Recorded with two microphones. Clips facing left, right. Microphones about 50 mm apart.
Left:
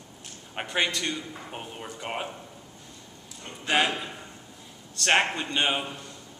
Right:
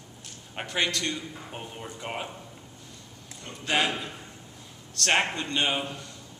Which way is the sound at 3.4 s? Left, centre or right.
Centre.